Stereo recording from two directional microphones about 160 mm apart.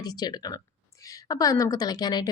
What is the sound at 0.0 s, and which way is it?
Speech, 25° left (ahead or behind).